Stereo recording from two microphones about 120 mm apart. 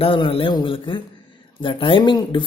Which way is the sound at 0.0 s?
50° left (ahead or behind).